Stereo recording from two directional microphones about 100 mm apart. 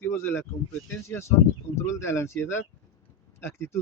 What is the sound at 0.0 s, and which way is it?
Speech, 25° left (ahead or behind).